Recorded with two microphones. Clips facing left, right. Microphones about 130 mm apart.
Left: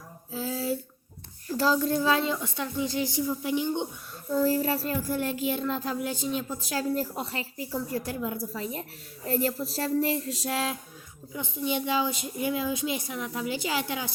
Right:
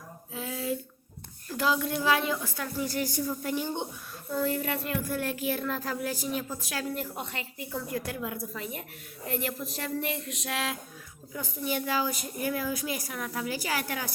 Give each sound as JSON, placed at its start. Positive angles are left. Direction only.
{"t": 0.3, "sound": "a sound", "side_deg": 30}
{"t": 1.5, "sound": "child singing", "side_deg": 30}
{"t": 4.4, "sound": "child singing", "side_deg": 35}
{"t": 8.5, "sound": "a woman's voice", "side_deg": 30}
{"t": 11.3, "sound": "child singing", "side_deg": 20}